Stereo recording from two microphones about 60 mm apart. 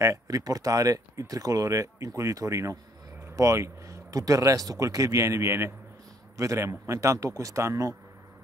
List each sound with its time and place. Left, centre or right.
0.0 s speech: right
6.3 s speech: right